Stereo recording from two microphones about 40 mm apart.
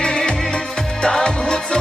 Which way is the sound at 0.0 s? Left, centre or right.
Left.